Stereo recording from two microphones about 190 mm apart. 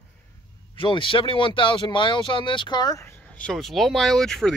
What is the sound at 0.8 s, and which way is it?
Speech, 25° left (ahead or behind).